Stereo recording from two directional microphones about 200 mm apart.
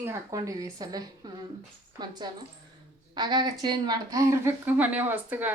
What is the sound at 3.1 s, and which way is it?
Speech, 20° right (ahead or behind).